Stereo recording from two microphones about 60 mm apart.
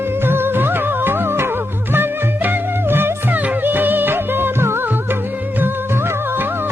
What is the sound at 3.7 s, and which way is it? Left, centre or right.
Music, right.